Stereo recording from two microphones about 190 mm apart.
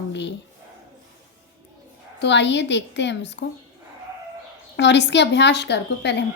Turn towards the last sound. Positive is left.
turn(degrees=65)  # may be behind; listen again after turning